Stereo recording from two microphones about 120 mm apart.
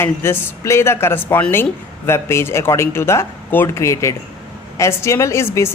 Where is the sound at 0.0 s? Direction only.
20° left (ahead or behind).